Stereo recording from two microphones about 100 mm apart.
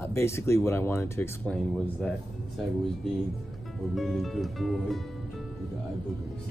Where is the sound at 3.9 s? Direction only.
Centre (ahead or behind).